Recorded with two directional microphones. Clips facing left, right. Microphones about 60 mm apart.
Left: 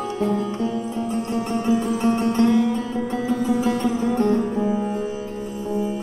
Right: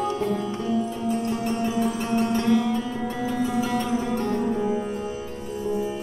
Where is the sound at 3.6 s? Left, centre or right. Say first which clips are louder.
Left 3 dB; left.